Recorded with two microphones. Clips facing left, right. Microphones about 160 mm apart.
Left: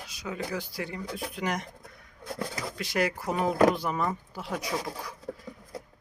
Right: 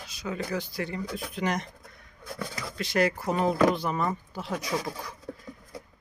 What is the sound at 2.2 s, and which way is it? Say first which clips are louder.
Speech: left 2 dB; 40° left (ahead or behind).